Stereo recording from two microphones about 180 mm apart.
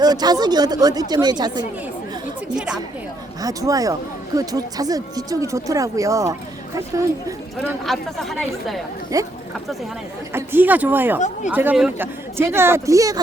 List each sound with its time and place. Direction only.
0.0 s speech: 20° right (ahead or behind)
3.4 s speech: 20° right (ahead or behind)
7.9 s a woman's voice: centre (ahead or behind)
9.1 s speech: 20° right (ahead or behind)
10.3 s speech: 10° right (ahead or behind)